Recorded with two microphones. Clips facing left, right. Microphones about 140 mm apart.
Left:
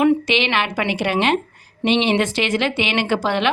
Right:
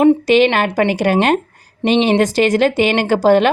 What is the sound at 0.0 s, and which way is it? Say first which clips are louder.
A woman's voice: right 6 dB; 40° right (ahead or behind).